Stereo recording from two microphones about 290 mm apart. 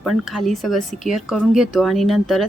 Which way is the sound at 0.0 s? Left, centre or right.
Centre.